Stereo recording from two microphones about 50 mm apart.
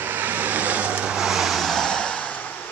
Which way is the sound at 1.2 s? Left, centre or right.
Centre.